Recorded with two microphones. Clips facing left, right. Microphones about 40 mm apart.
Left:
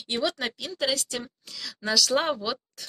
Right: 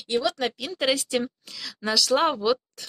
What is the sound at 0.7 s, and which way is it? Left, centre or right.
Speech, right.